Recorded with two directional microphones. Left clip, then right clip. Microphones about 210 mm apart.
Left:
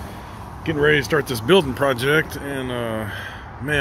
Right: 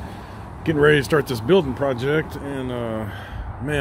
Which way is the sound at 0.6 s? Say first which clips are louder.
Right 1 dB; 25° right (ahead or behind).